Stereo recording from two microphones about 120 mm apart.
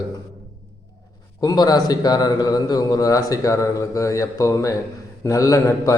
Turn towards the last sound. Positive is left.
turn(degrees=25)  # may be behind; listen again after turning